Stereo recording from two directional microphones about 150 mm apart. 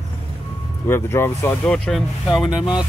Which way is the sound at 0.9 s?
15° left (ahead or behind).